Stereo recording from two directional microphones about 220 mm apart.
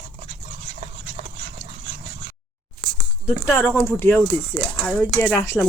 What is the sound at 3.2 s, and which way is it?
Speech, centre (ahead or behind).